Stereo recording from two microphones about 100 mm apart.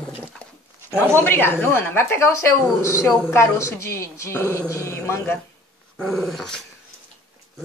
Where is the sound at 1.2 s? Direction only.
20° left (ahead or behind).